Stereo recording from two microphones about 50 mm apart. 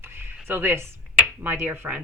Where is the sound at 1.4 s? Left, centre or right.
Right.